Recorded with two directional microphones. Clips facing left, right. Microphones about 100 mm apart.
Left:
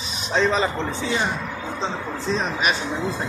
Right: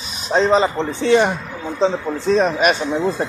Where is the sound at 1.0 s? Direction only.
65° right (ahead or behind).